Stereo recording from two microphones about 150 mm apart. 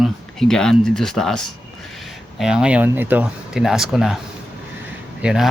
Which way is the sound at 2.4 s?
5° right (ahead or behind).